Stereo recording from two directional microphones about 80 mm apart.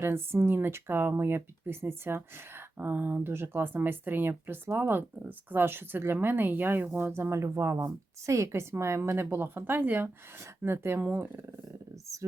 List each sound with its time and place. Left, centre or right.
0.0 s speech: right